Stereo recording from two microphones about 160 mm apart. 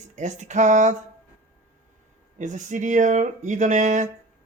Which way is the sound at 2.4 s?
50° right (ahead or behind).